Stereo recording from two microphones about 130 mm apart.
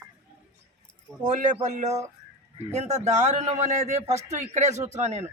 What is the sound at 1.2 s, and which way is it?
A man's voice, 70° right (ahead or behind).